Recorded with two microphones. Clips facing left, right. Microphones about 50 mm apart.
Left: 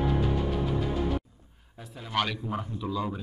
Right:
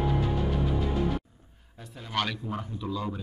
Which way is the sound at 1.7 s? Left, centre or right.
Centre.